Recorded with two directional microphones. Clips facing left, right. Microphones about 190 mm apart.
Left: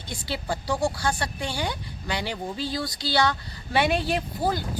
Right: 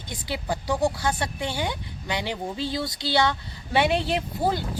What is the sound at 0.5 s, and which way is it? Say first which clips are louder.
Speech: right 2 dB; 20° right (ahead or behind).